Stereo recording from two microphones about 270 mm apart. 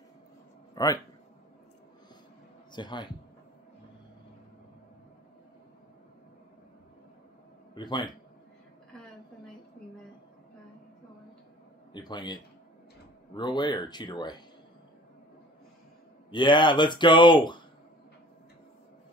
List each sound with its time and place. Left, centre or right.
0.8 s speech: centre
2.7 s speech: centre
7.7 s a man's voice: centre
11.9 s speech: centre
16.3 s speech: centre